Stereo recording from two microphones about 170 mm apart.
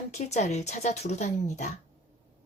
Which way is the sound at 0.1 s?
40° left (ahead or behind).